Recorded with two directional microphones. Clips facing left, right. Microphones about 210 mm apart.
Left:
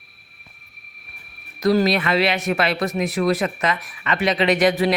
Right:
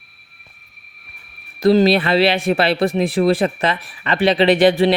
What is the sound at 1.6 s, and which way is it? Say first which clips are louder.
Speech: right 5 dB; 30° right (ahead or behind).